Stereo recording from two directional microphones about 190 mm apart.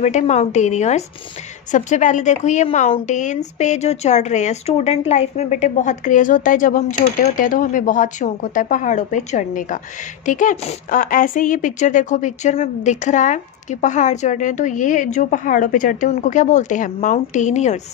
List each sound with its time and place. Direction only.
0.0 s a woman's voice: 35° left (ahead or behind)